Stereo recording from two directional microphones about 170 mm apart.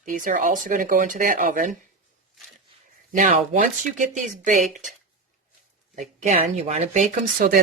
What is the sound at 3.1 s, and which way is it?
Speech, 45° right (ahead or behind).